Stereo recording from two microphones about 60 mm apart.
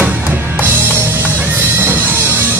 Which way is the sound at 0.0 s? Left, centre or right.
Right.